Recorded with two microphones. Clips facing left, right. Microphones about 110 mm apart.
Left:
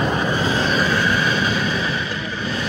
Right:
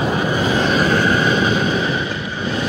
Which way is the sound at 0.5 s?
45° right (ahead or behind).